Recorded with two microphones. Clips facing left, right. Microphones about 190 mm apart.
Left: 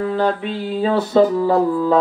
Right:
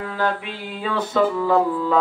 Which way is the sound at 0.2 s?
35° left (ahead or behind).